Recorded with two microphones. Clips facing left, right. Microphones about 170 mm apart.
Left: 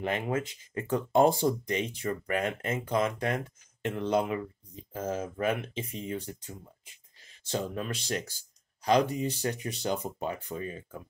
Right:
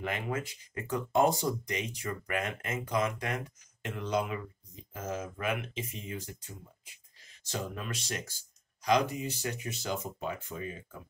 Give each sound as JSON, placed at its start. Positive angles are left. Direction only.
{"t": 0.0, "sound": "speech", "side_deg": 30}
{"t": 7.4, "sound": "speech", "side_deg": 30}